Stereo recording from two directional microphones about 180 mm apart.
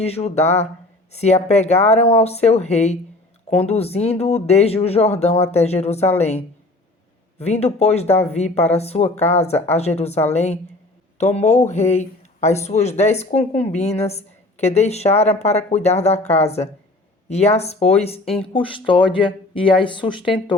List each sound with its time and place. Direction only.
0.0 s speech: 35° left (ahead or behind)